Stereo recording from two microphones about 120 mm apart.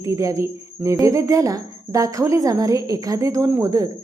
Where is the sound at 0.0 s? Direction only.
25° right (ahead or behind).